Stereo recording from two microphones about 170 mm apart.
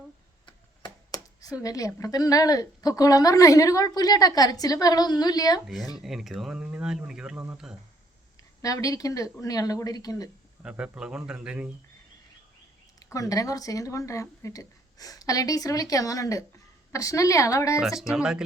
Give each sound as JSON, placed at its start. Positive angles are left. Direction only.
{"t": 0.4, "sound": "a sound", "side_deg": 25}
{"t": 1.6, "sound": "a woman's voice", "side_deg": 20}
{"t": 5.6, "sound": "speech", "side_deg": 0}
{"t": 8.4, "sound": "a woman's voice", "side_deg": 20}
{"t": 10.6, "sound": "speech", "side_deg": -5}
{"t": 13.0, "sound": "a woman's voice", "side_deg": 20}
{"t": 17.7, "sound": "speech", "side_deg": 0}